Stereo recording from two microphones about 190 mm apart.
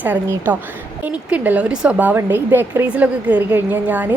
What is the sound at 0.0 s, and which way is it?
A woman's voice, 10° right (ahead or behind).